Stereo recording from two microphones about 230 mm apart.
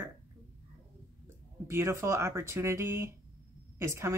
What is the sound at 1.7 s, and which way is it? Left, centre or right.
A woman's voice, centre.